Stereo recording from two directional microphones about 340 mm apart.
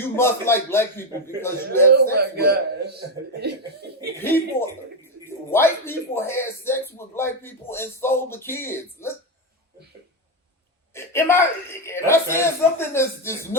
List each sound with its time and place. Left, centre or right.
0.0 s speech: centre
2.1 s a man's voice: right
4.2 s speech: centre
5.5 s speech: centre
10.9 s speech: centre